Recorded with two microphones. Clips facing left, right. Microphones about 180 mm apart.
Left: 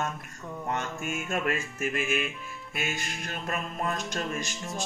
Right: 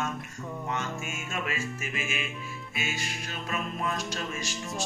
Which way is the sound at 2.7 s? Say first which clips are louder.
Left 2 dB; centre (ahead or behind).